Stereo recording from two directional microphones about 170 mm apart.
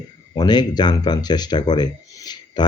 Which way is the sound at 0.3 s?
25° left (ahead or behind).